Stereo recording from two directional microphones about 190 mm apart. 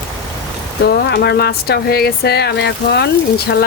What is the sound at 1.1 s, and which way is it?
Speech, 60° left (ahead or behind).